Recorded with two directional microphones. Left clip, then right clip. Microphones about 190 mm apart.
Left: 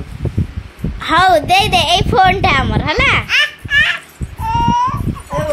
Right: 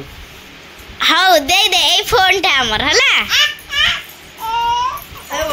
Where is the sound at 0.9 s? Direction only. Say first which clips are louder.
Even; 5° left (ahead or behind).